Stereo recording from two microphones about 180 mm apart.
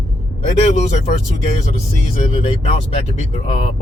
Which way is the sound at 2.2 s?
35° left (ahead or behind).